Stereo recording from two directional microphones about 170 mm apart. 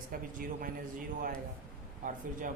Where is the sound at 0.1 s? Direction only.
55° right (ahead or behind).